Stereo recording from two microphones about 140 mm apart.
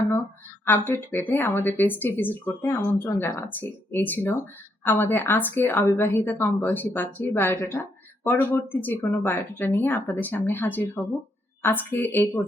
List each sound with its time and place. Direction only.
0.6 s a woman's voice: 15° left (ahead or behind)